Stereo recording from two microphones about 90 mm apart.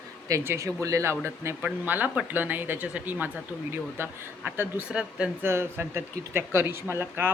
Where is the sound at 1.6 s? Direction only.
20° right (ahead or behind).